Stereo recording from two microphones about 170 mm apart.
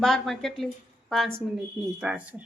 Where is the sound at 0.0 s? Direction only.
Centre (ahead or behind).